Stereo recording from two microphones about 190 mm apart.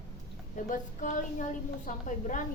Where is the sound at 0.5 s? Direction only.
40° left (ahead or behind).